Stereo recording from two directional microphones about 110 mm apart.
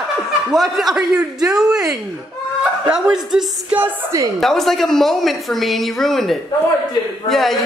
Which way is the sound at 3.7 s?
15° right (ahead or behind).